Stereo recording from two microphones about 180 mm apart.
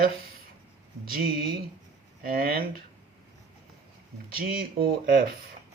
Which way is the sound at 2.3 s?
55° right (ahead or behind).